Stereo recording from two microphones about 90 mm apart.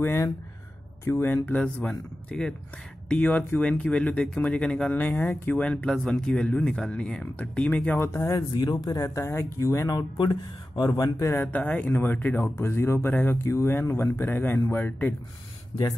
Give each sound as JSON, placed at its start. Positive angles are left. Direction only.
{"t": 0.0, "sound": "speech", "side_deg": 30}
{"t": 5.6, "sound": "speech", "side_deg": 10}
{"t": 8.1, "sound": "speech", "side_deg": 45}
{"t": 11.4, "sound": "speech", "side_deg": 15}